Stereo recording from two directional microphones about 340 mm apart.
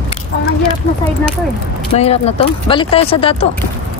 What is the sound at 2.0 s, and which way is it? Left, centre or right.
Speech, centre.